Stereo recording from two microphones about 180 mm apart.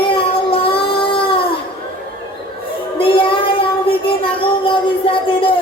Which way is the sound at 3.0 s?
30° left (ahead or behind).